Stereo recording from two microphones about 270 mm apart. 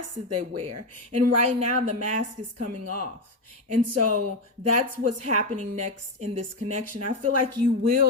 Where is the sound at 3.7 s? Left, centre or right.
Right.